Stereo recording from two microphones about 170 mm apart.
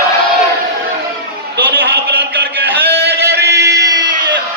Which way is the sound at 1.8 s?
70° right (ahead or behind).